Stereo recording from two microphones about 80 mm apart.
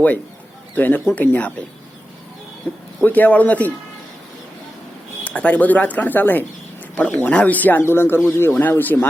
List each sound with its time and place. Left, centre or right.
0.8 s speech: left
2.7 s speech: left
5.2 s speech: centre